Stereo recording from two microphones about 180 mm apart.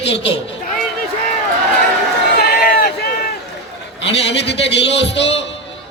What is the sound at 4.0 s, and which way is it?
A man's voice, 80° left.